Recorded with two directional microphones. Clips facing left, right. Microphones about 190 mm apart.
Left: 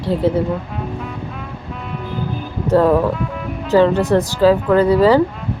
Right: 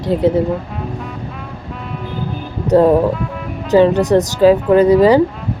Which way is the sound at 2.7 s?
20° right (ahead or behind).